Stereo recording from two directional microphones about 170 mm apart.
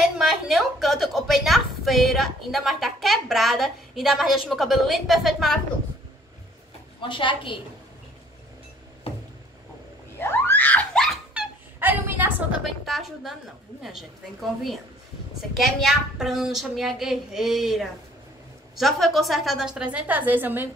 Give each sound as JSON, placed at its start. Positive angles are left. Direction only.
{"t": 0.2, "sound": "a woman's voice", "side_deg": -5}
{"t": 7.0, "sound": "a woman's voice", "side_deg": 30}
{"t": 9.1, "sound": "a sound", "side_deg": 35}
{"t": 10.1, "sound": "a sound", "side_deg": 15}
{"t": 11.8, "sound": "a woman's voice", "side_deg": -10}
{"t": 12.8, "sound": "a woman's voice", "side_deg": 0}